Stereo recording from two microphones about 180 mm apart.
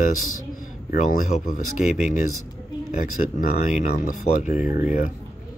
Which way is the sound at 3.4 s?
45° left (ahead or behind).